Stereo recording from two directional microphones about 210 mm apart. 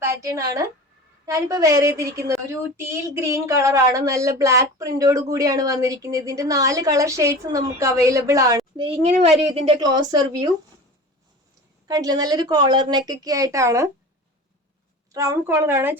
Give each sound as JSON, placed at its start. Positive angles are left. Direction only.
{"t": 0.0, "sound": "a woman's voice", "side_deg": -15}
{"t": 11.9, "sound": "a woman's voice", "side_deg": -20}
{"t": 15.1, "sound": "a woman's voice", "side_deg": -15}